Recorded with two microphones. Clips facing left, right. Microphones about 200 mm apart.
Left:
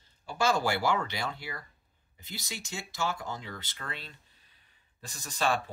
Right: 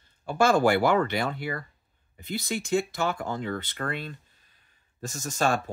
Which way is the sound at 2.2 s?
55° right (ahead or behind).